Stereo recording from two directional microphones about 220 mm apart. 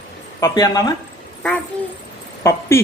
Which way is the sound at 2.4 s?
15° left (ahead or behind).